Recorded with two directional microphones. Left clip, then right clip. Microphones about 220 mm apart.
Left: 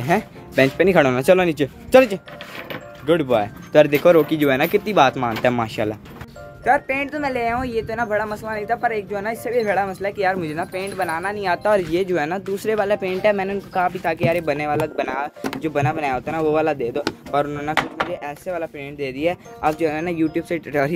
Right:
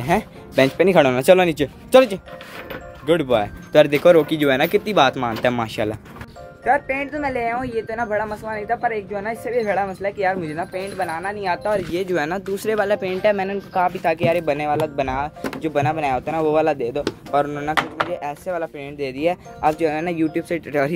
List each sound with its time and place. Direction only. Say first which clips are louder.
0.0 s speech: even; centre (ahead or behind)
11.5 s speech: left 5 dB; 30° left (ahead or behind)
12.1 s speech: even; centre (ahead or behind)